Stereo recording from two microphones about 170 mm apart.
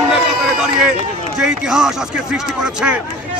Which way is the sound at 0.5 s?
5° right (ahead or behind).